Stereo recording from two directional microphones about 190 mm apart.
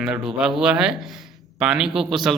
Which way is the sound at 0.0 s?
5° right (ahead or behind).